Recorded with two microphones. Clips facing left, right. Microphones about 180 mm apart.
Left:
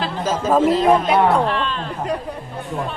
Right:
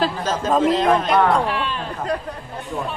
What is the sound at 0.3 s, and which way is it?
A man's voice, 5° left (ahead or behind).